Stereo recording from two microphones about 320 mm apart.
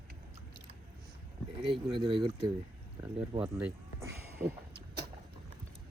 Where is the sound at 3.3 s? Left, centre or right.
Centre.